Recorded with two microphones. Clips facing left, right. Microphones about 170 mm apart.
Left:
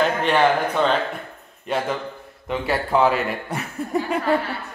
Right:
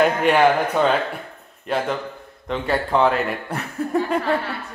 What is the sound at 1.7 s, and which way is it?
Speech, centre (ahead or behind).